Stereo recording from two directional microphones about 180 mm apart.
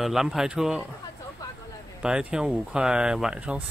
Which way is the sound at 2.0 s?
5° right (ahead or behind).